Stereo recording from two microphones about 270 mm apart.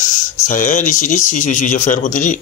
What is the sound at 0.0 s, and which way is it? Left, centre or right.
Speech, left.